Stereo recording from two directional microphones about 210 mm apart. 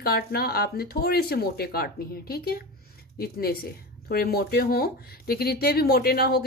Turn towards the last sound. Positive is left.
turn(degrees=50)  # may be behind; listen again after turning